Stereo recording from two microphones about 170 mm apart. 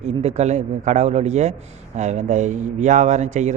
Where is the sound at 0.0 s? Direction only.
40° right (ahead or behind).